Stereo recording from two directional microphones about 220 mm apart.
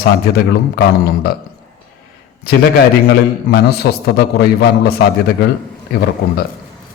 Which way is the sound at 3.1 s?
45° left (ahead or behind).